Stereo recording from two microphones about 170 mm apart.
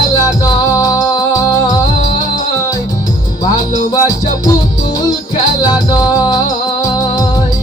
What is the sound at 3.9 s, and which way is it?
Music, 20° left (ahead or behind).